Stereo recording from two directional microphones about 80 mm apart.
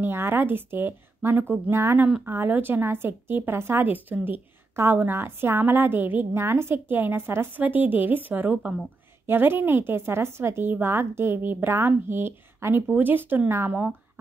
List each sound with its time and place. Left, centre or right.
0.0 s a woman's voice: right
2.0 s speech: centre
2.2 s a woman's voice: right